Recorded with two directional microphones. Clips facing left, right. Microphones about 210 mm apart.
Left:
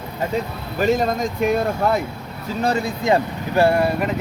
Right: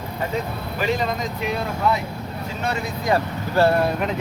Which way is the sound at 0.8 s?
45° left (ahead or behind).